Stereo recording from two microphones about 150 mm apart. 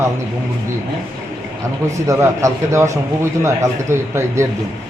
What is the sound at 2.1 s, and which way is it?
A man's voice, 20° right (ahead or behind).